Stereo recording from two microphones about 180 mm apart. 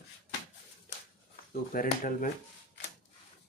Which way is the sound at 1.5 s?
50° left (ahead or behind).